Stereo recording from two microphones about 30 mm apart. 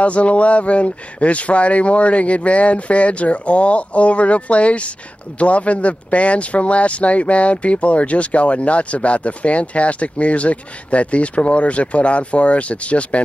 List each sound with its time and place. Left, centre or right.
0.0 s speech: left